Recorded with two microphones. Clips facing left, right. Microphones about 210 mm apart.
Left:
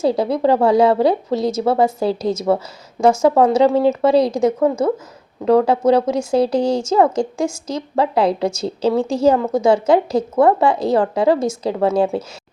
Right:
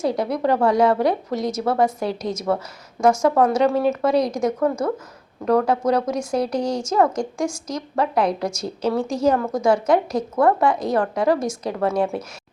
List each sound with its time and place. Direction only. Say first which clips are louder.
0.0 s a woman's voice: left 5 dB; 30° left (ahead or behind)